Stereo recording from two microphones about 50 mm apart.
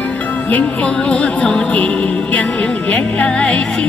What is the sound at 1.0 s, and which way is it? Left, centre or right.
Speech, left.